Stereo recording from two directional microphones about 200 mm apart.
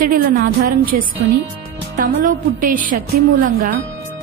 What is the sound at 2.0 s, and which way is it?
A woman's voice, 40° right (ahead or behind).